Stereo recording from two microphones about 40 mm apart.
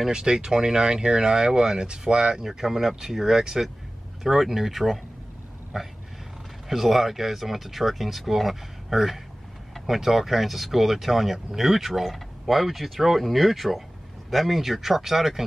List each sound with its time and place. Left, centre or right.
0.1 s speech: right